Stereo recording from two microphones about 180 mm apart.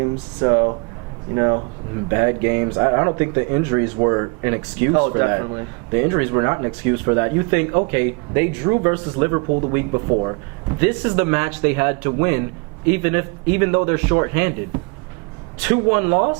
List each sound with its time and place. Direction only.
0.4 s speech: 25° right (ahead or behind)
15.6 s speech: 15° right (ahead or behind)